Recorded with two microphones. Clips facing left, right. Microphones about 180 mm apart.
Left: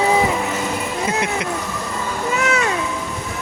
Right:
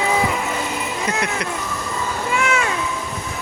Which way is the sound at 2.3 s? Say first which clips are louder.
Left 1 dB; 40° left (ahead or behind).